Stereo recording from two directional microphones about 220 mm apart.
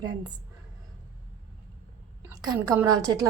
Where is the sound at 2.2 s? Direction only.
15° right (ahead or behind).